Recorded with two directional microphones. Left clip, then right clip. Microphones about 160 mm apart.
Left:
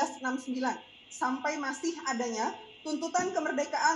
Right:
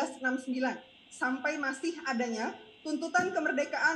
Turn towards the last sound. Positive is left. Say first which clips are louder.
# left 1 dB
turn(degrees=-35)  # may be behind; listen again after turning